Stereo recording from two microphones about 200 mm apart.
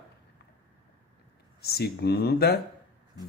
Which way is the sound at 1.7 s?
55° left (ahead or behind).